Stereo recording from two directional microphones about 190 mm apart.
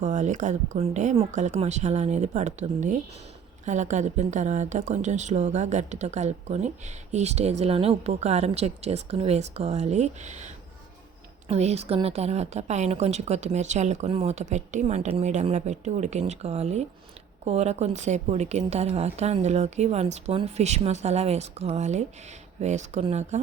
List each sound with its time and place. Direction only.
0.0 s speech: 40° right (ahead or behind)